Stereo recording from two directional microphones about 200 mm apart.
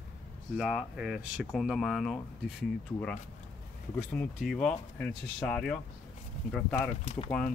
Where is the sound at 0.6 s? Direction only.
Centre (ahead or behind).